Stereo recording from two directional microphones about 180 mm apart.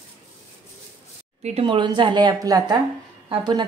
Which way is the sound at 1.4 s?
35° right (ahead or behind).